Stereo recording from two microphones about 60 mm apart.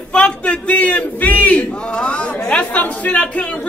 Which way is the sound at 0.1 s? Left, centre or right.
Centre.